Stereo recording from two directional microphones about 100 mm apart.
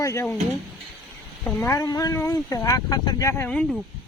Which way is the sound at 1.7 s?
40° left (ahead or behind).